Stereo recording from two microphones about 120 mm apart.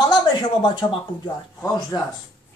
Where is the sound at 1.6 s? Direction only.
30° left (ahead or behind).